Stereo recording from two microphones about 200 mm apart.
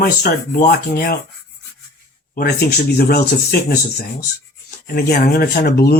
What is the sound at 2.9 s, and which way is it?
Speech, 50° left (ahead or behind).